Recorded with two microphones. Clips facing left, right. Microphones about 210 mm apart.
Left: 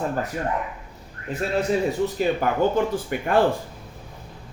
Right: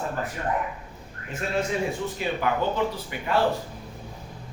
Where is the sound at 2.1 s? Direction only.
45° left (ahead or behind).